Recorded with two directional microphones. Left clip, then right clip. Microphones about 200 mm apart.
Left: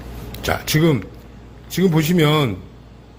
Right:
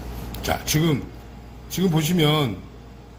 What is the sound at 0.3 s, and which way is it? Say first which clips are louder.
A man's voice: left 3 dB; 30° left (ahead or behind).